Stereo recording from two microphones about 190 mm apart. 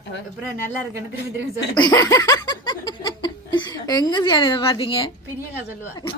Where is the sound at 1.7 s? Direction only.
20° left (ahead or behind).